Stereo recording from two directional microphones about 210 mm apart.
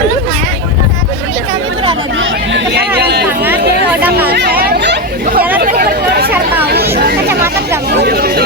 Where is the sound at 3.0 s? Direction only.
50° right (ahead or behind).